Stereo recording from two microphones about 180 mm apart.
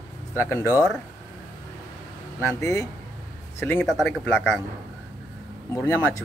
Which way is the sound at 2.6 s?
20° left (ahead or behind).